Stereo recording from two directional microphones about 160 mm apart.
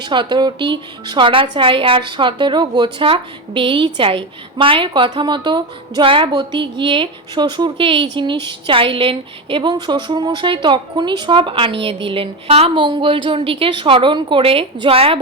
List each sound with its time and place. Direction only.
0.0 s a woman's voice: 30° right (ahead or behind)